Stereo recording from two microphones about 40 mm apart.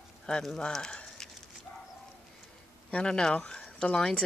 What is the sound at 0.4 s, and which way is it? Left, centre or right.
Speech, centre.